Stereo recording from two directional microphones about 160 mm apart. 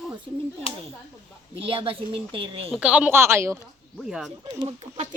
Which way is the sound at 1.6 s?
35° right (ahead or behind).